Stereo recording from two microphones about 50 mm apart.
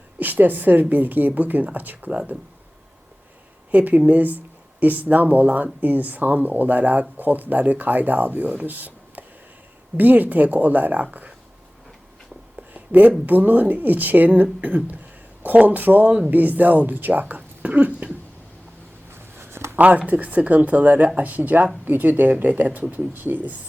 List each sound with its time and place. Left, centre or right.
0.2 s speech: right
3.7 s speech: right
12.7 s a sound: right
13.2 s speech: right
19.4 s writing: right
19.7 s speech: right